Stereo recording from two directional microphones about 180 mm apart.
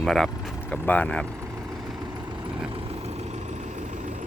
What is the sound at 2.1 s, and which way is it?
Vehicle, 25° right (ahead or behind).